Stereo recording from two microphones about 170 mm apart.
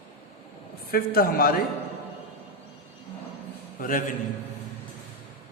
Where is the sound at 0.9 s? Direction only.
60° left (ahead or behind).